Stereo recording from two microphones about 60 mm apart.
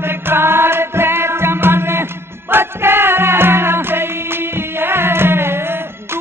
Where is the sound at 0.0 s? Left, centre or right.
Right.